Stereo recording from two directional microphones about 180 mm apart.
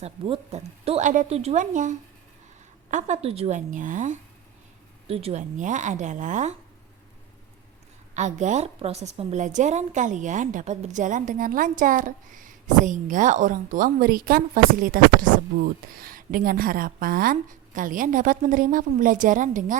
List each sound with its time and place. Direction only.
0.0 s a woman's voice: 35° right (ahead or behind)
5.0 s a woman's voice: 35° right (ahead or behind)
8.1 s a woman's voice: 40° right (ahead or behind)